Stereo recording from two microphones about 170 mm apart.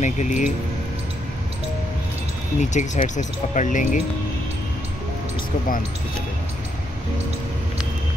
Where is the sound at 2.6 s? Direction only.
45° left (ahead or behind).